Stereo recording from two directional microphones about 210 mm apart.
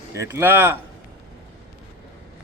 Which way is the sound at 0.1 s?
15° right (ahead or behind).